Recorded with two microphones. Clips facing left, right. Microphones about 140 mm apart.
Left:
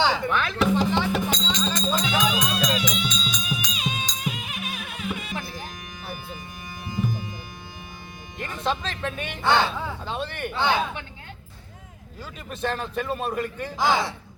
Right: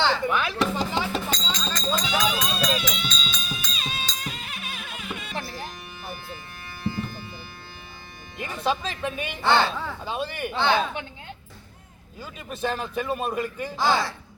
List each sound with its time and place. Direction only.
0.3 s speech: 10° right (ahead or behind)
0.7 s music: 5° right (ahead or behind)
1.1 s music: 15° left (ahead or behind)
6.8 s music: 15° left (ahead or behind)
8.4 s speech: 5° right (ahead or behind)
9.4 s speech: 15° left (ahead or behind)
10.0 s a man's voice: 5° right (ahead or behind)
10.6 s speech: 15° left (ahead or behind)
12.5 s a man's voice: 5° right (ahead or behind)
13.7 s speech: 15° left (ahead or behind)